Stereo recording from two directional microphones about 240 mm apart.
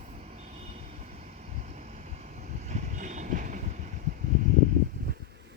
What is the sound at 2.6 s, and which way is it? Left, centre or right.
Vehicle, right.